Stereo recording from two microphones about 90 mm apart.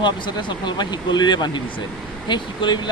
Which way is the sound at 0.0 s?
55° left (ahead or behind).